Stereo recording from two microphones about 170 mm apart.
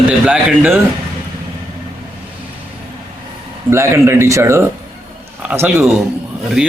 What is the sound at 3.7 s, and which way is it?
A man's voice, 15° right (ahead or behind).